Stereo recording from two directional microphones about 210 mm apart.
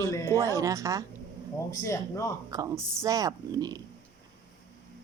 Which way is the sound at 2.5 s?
15° right (ahead or behind).